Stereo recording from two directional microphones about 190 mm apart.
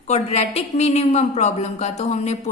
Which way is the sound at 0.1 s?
35° left (ahead or behind).